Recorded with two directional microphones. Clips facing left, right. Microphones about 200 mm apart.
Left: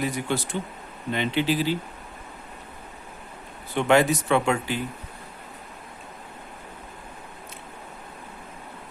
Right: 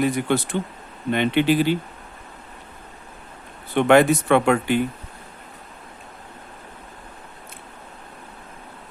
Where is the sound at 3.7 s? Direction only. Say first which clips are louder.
Right 5 dB; 60° right (ahead or behind).